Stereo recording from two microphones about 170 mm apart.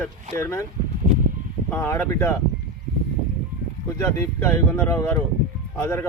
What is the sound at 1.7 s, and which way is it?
Speech, 15° left (ahead or behind).